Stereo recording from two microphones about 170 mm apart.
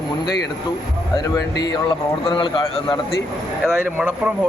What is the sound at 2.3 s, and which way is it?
Speech, 30° left (ahead or behind).